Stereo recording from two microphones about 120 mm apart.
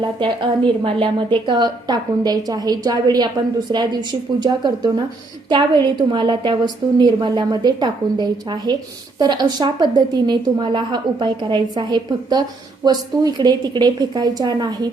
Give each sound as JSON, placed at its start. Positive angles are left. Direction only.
{"t": 0.0, "sound": "a woman's voice", "side_deg": -45}
{"t": 4.4, "sound": "a woman's voice", "side_deg": -35}